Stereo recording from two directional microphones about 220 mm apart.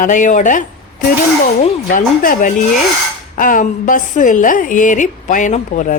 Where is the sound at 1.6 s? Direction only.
35° left (ahead or behind).